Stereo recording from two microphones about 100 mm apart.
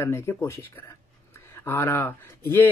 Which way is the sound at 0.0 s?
25° left (ahead or behind).